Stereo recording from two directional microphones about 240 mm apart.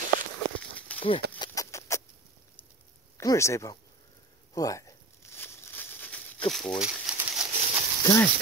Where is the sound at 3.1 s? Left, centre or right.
Centre.